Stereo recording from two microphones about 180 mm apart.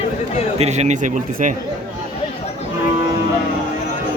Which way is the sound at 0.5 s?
40° right (ahead or behind).